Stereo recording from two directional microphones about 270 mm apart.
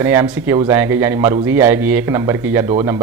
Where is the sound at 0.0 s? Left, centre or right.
Centre.